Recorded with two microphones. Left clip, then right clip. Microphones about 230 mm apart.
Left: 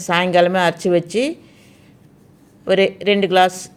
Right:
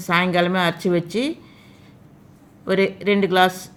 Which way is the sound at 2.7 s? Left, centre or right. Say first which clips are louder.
Left 4 dB; centre.